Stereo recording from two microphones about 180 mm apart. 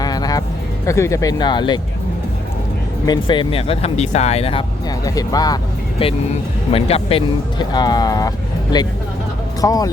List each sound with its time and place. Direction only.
0.0 s music: 20° left (ahead or behind)
0.9 s speech: 15° left (ahead or behind)
3.1 s speech: 25° left (ahead or behind)
5.0 s speech: 20° left (ahead or behind)
6.0 s speech: 30° left (ahead or behind)